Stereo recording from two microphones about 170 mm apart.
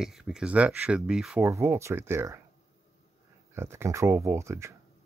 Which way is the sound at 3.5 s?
15° right (ahead or behind).